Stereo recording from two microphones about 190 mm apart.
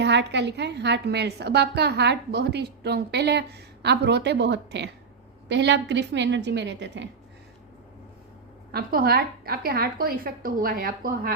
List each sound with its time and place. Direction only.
0.0 s a woman's voice: 65° right (ahead or behind)
8.7 s a woman's voice: 50° right (ahead or behind)